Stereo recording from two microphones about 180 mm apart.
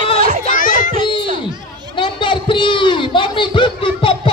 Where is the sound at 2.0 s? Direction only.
25° left (ahead or behind).